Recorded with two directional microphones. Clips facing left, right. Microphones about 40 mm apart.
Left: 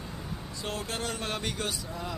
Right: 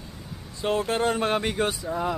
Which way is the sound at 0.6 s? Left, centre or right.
Right.